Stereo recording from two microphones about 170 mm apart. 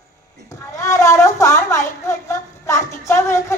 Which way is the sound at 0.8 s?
15° left (ahead or behind).